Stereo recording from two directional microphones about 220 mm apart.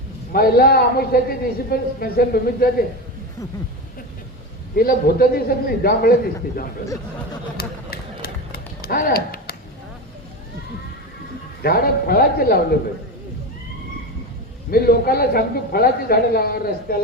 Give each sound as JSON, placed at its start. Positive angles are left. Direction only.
{"t": 0.3, "sound": "a man's voice", "side_deg": 45}
{"t": 4.7, "sound": "a man's voice", "side_deg": 45}
{"t": 7.5, "sound": "run", "side_deg": 45}
{"t": 11.6, "sound": "a man's voice", "side_deg": 45}
{"t": 14.7, "sound": "a man's voice", "side_deg": 45}